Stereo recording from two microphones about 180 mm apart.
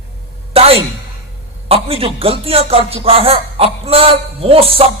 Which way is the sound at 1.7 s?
30° right (ahead or behind).